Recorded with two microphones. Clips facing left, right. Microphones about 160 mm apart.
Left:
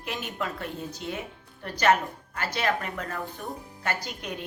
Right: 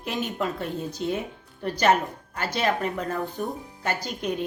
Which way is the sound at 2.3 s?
25° right (ahead or behind).